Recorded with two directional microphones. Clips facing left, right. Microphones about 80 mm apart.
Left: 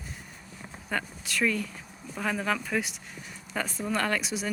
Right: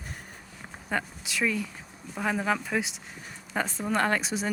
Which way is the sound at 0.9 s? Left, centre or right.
Centre.